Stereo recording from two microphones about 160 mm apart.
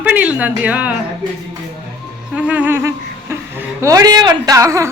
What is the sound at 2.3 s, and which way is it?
Speech, 5° right (ahead or behind).